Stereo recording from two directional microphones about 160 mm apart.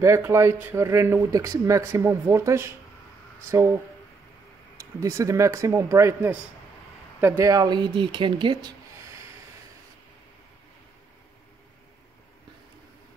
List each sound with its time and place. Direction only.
0.0 s speech: 15° right (ahead or behind)
4.7 s speech: 20° right (ahead or behind)